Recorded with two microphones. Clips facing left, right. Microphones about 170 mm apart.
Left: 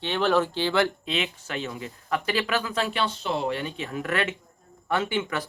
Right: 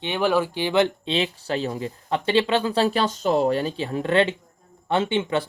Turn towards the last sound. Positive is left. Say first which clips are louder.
# right 5 dB
turn(degrees=-25)  # may be behind; listen again after turning